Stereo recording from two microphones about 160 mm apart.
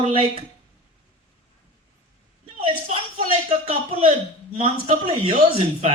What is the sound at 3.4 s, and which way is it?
A man's voice, 35° right (ahead or behind).